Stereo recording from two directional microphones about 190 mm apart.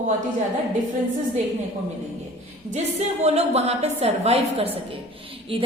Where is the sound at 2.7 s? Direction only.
35° right (ahead or behind).